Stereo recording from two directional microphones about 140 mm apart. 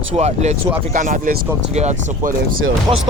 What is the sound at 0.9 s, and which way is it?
Speech, 70° right (ahead or behind).